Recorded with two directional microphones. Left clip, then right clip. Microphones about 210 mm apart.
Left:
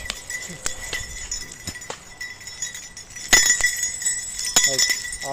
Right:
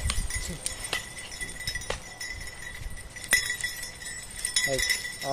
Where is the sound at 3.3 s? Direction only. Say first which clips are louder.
Left 9 dB; 55° left (ahead or behind).